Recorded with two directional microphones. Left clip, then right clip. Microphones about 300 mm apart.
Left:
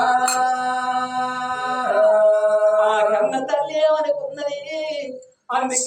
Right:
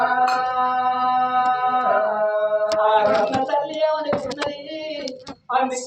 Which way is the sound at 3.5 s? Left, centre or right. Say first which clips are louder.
Left 2 dB; centre.